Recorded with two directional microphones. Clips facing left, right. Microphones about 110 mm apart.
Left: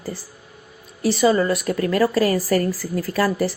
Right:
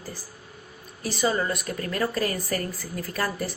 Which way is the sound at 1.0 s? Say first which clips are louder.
Left 8 dB; 90° left.